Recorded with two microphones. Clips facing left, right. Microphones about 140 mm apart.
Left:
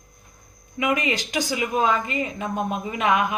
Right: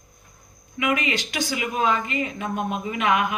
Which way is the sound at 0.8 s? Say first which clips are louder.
Left 1 dB; 35° left (ahead or behind).